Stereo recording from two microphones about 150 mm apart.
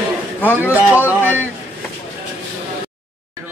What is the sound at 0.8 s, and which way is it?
Speech, 10° right (ahead or behind).